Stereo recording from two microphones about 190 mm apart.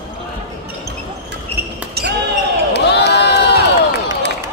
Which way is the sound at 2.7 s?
60° left (ahead or behind).